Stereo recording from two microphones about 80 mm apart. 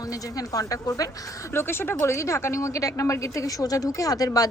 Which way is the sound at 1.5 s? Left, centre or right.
Left.